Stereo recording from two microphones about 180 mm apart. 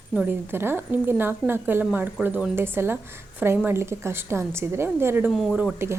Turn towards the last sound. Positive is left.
turn(degrees=-10)  # may be behind; listen again after turning